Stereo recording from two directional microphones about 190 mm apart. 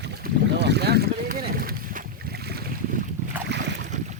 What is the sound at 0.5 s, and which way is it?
Boat, 60° right (ahead or behind).